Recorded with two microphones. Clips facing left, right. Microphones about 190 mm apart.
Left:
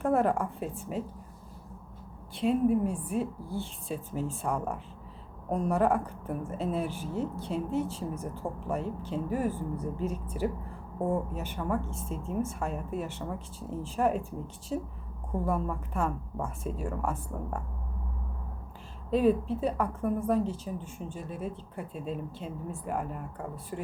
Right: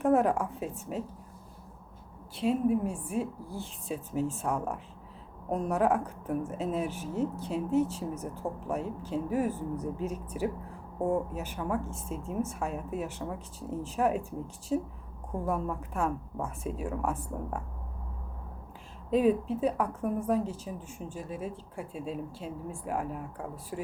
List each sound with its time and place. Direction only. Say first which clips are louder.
0.0 s a woman's voice: right 1 dB; 5° right (ahead or behind)
2.4 s a woman's voice: left 2 dB; 5° right (ahead or behind)
19.1 s a woman's voice: even; centre (ahead or behind)